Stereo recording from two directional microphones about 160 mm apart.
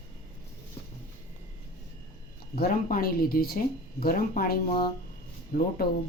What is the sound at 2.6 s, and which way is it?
Speech, 65° left (ahead or behind).